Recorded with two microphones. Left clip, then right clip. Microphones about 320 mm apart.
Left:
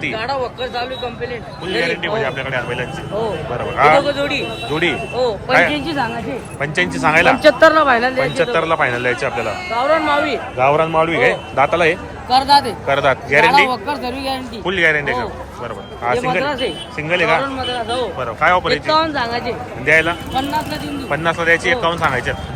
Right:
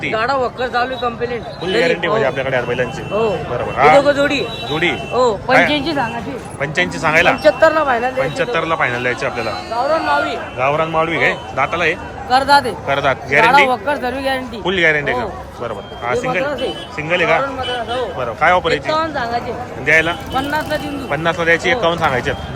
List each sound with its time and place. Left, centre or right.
0.1 s a man's voice: right
1.6 s speech: centre
3.1 s a man's voice: right
4.7 s a man's voice: centre
5.1 s a man's voice: right
6.6 s a man's voice: centre
7.4 s speech: left
8.2 s a man's voice: centre
9.8 s a sound: left
10.6 s a man's voice: centre
17.0 s speech: centre
18.9 s speech: left
19.8 s a man's voice: centre